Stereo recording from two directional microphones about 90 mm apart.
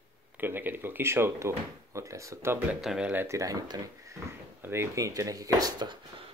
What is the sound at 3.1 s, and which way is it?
Speech, 25° right (ahead or behind).